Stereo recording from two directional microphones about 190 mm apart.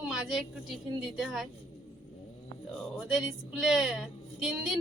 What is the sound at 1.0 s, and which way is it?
Speech, centre (ahead or behind).